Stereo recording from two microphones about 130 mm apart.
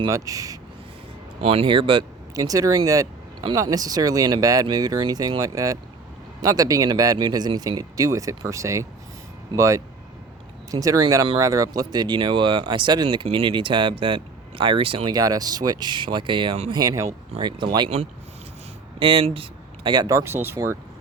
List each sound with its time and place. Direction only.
0.1 s speech: 25° right (ahead or behind)
1.5 s speech: 45° right (ahead or behind)
2.3 s speech: 25° right (ahead or behind); by 15.1 s 45° right (ahead or behind)
15.1 s speech: 30° right (ahead or behind)
16.7 s speech: 25° right (ahead or behind)
17.3 s speech: 40° right (ahead or behind)
18.9 s speech: 45° right (ahead or behind); by 20.7 s 20° right (ahead or behind)